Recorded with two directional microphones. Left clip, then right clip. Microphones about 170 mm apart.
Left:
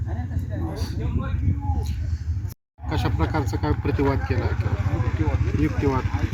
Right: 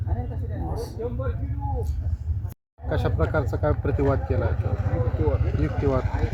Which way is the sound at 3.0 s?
55° right (ahead or behind).